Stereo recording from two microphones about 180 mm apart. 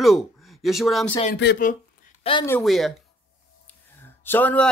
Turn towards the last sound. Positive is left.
turn(degrees=10)  # may be behind; listen again after turning